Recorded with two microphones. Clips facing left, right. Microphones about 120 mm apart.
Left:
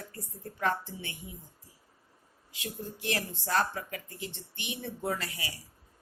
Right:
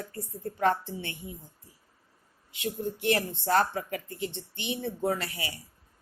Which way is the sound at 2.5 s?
25° right (ahead or behind).